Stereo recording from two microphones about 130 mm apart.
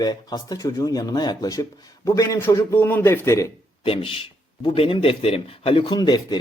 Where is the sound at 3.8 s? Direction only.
45° left (ahead or behind).